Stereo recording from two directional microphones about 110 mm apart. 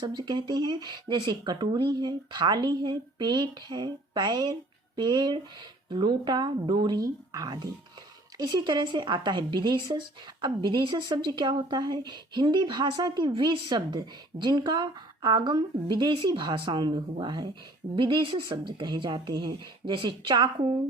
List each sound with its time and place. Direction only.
0.0 s a woman's voice: 40° right (ahead or behind)